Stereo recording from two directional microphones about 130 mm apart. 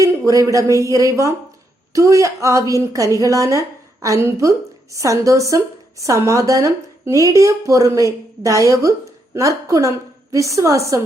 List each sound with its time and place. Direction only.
0.0 s a woman's voice: 25° right (ahead or behind)